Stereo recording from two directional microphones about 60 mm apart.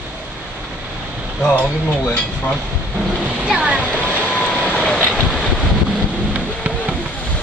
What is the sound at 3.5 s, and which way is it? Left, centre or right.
Speech, centre.